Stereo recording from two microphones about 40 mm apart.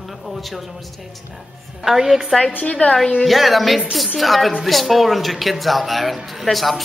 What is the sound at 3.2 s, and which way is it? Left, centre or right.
A woman's voice, centre.